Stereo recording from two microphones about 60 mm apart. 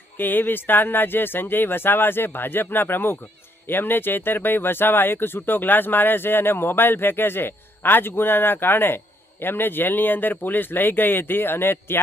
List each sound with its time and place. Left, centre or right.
0.2 s speech: left